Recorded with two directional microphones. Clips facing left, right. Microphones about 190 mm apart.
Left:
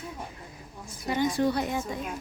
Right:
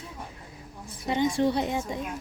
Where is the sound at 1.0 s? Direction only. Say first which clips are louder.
Right 1 dB; 25° right (ahead or behind).